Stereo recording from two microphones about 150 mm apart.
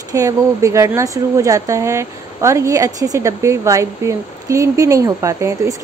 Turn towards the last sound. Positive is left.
turn(degrees=-20)  # may be behind; listen again after turning